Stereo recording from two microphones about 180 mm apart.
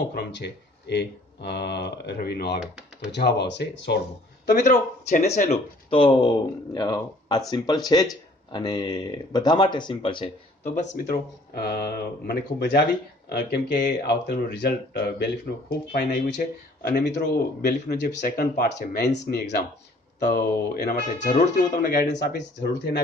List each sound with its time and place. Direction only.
0.1 s speech: 65° left (ahead or behind)
4.6 s speech: 40° left (ahead or behind)
11.0 s speech: 60° left (ahead or behind)
17.6 s speech: 50° left (ahead or behind)
21.3 s speech: 45° left (ahead or behind)
22.2 s speech: 65° left (ahead or behind)